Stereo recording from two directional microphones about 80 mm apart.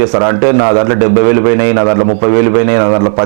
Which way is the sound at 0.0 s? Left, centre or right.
Right.